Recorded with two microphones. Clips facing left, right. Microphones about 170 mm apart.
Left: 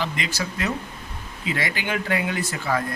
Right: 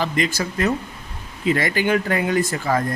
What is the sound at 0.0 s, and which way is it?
A man's voice, 45° right (ahead or behind).